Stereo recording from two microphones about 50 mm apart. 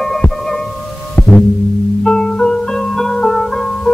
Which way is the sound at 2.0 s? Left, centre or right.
Centre.